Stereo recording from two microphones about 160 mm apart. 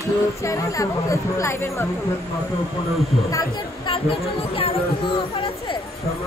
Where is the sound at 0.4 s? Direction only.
20° left (ahead or behind).